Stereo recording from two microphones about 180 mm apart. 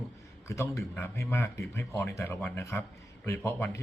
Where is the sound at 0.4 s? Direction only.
15° left (ahead or behind).